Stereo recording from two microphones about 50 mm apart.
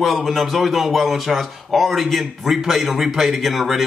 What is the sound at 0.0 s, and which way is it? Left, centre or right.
A man's voice, centre.